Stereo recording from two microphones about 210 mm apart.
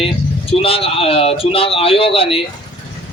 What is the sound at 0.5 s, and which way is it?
A man's voice, 25° left (ahead or behind).